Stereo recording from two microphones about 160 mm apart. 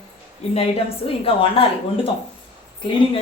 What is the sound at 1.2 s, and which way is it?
Speech, 35° left (ahead or behind).